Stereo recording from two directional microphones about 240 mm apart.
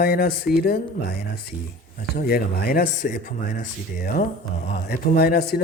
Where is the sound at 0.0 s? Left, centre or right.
Left.